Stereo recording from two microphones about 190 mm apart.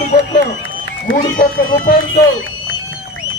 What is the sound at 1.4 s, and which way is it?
Speech, 45° left (ahead or behind).